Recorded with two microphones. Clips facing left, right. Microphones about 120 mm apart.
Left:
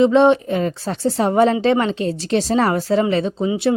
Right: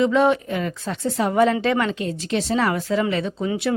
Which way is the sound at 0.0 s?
25° left (ahead or behind).